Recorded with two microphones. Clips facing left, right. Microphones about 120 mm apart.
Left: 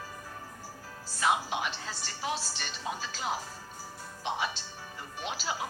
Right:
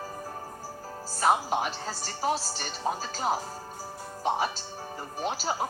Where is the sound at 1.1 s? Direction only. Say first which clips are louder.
Right 4 dB; 40° right (ahead or behind).